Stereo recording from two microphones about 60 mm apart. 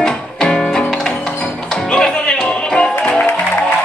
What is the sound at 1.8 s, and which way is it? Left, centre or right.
Music, centre.